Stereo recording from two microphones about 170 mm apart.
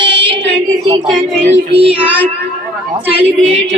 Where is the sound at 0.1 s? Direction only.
30° right (ahead or behind).